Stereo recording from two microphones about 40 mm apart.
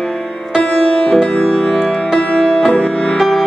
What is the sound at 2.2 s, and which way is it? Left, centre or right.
Music, left.